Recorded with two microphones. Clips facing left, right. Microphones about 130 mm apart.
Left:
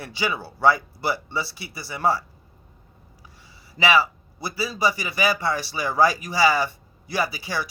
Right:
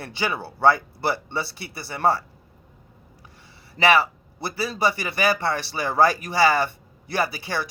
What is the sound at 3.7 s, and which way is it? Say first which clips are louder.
A man's voice: right 1 dB; 55° right (ahead or behind).